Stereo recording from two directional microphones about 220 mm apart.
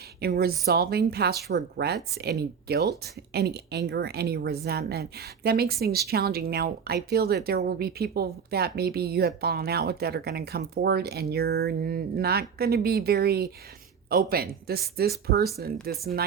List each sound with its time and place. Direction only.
0.2 s speech: 45° right (ahead or behind)